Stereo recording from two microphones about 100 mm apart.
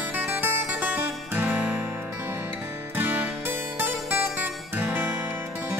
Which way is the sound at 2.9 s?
20° right (ahead or behind).